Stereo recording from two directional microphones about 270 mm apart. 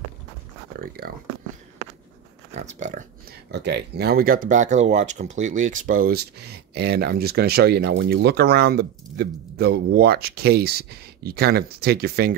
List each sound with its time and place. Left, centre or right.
0.7 s speech: right
2.5 s speech: right
3.5 s speech: right